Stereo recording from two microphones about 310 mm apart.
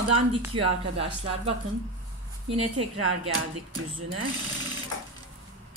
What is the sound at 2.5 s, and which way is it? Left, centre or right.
Speech, centre.